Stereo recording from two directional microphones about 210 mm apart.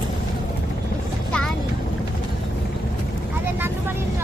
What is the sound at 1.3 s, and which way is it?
Boat, 5° left (ahead or behind).